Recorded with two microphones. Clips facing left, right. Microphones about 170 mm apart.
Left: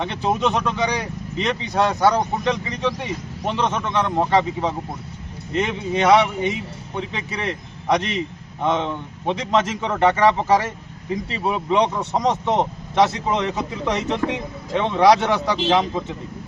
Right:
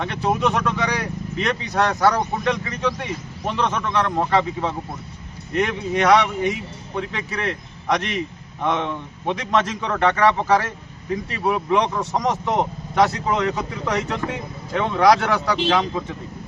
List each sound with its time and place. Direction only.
0.3 s a man's voice: 20° left (ahead or behind)
11.3 s a man's voice: 20° left (ahead or behind)